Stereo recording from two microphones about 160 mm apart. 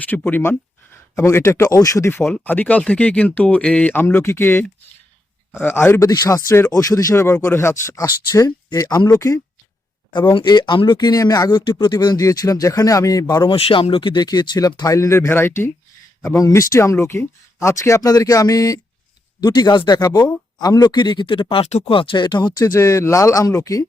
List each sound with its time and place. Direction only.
0.0 s speech: 10° left (ahead or behind)
5.6 s speech: 15° left (ahead or behind)